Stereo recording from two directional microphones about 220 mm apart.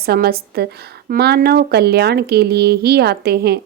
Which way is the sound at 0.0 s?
45° right (ahead or behind).